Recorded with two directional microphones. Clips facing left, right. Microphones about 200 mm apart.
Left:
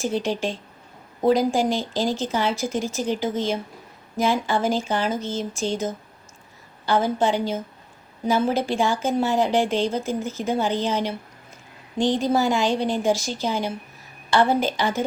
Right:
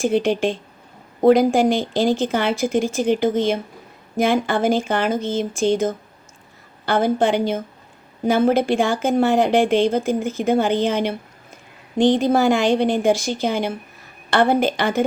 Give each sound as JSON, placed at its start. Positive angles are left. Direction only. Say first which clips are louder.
{"t": 0.0, "sound": "speech", "louder": "right 6 dB", "side_deg": -55}